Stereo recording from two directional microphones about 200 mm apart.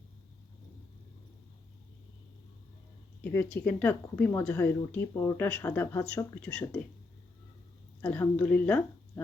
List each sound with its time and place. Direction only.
3.3 s speech: 5° left (ahead or behind)
8.0 s speech: 10° left (ahead or behind)